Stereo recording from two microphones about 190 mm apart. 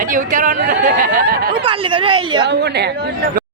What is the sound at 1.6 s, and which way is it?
Speech, 25° right (ahead or behind).